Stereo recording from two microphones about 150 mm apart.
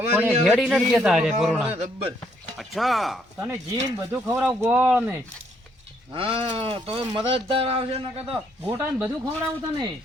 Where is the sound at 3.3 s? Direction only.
15° right (ahead or behind).